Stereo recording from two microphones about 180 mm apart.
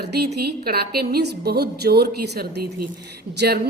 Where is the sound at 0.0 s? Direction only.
65° right (ahead or behind).